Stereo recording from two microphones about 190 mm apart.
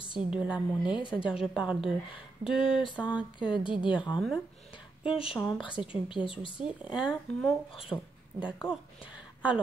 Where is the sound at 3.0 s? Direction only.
Centre (ahead or behind).